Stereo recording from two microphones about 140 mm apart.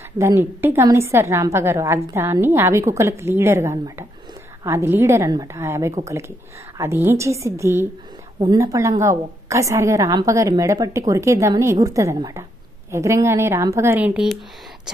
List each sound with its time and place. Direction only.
0.2 s a woman's voice: 15° right (ahead or behind)